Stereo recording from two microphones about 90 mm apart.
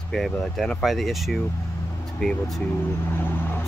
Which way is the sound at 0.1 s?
Centre (ahead or behind).